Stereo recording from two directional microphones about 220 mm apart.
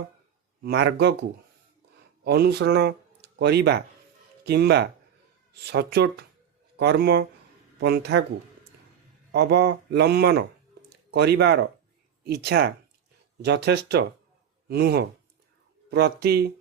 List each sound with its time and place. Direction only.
0.6 s speech: 50° right (ahead or behind)
2.2 s speech: 50° right (ahead or behind)
9.3 s speech: 45° right (ahead or behind)